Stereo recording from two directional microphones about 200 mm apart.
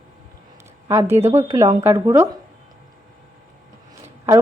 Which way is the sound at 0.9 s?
10° right (ahead or behind).